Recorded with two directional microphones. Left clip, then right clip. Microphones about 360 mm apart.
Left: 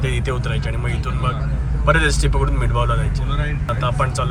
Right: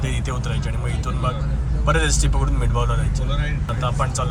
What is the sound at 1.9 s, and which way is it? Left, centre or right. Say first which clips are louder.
Speech: left 4 dB; centre.